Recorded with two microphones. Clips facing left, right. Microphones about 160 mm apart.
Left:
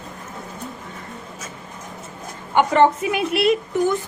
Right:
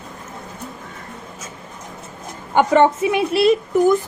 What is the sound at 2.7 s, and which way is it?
A woman's voice, 30° right (ahead or behind).